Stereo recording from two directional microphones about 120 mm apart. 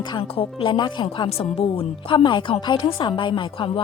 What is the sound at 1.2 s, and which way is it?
Speech, 55° left (ahead or behind).